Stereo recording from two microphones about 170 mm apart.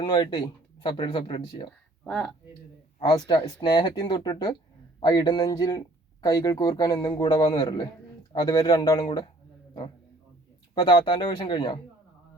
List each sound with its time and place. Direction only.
0.0 s speech: 30° left (ahead or behind)
2.0 s speech: 5° left (ahead or behind)
3.0 s speech: 30° left (ahead or behind)
10.8 s speech: 25° left (ahead or behind)